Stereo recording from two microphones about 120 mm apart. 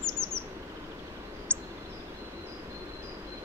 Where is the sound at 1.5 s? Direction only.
10° left (ahead or behind).